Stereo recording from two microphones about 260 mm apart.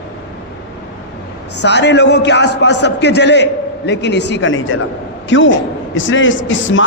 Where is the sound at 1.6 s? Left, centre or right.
Left.